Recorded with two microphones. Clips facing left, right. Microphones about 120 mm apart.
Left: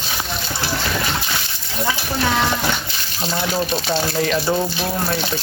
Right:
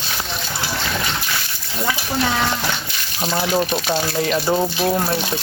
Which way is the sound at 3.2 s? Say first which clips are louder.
Right 2 dB; 20° right (ahead or behind).